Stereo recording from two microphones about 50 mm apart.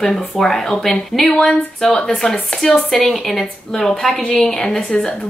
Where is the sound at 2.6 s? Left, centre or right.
Centre.